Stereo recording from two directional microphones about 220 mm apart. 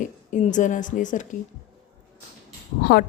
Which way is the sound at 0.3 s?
35° left (ahead or behind).